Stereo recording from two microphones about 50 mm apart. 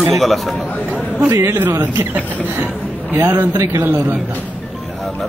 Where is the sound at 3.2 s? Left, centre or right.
Right.